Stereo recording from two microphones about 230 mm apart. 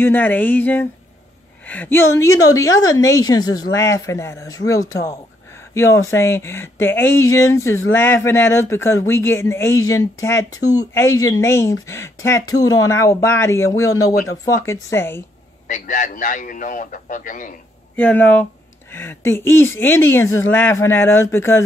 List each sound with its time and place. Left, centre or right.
0.0 s speech: centre
15.6 s speech: left
17.9 s speech: centre